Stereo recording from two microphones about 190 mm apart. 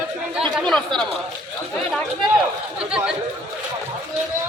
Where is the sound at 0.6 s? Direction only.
Centre (ahead or behind).